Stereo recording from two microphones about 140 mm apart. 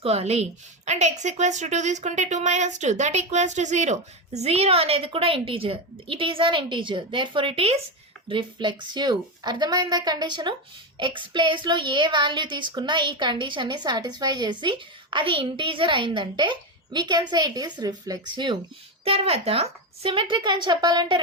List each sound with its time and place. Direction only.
0.0 s a woman's voice: 45° right (ahead or behind); by 18.5 s 30° right (ahead or behind)
19.0 s speech: 45° right (ahead or behind)